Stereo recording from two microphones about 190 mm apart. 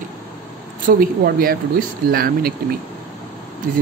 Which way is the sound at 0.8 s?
50° right (ahead or behind).